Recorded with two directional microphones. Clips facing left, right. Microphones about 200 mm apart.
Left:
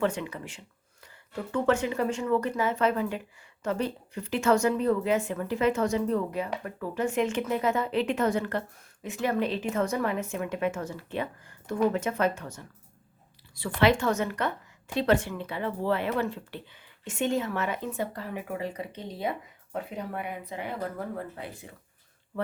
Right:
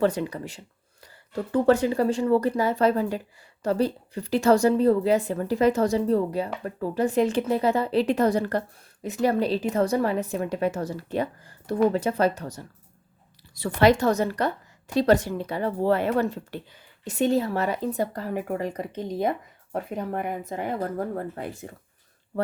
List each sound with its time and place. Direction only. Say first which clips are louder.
0.0 s a woman's voice: right 5 dB; 35° right (ahead or behind)